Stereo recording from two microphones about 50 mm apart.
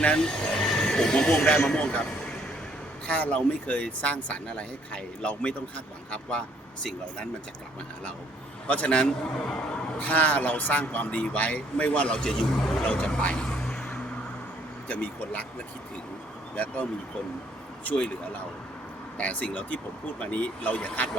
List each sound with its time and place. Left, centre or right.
0.2 s speech: centre
8.6 s speech: left; by 12.8 s centre
12.8 s speech: left
13.1 s vehicle: centre
14.8 s speech: left
17.8 s speech: left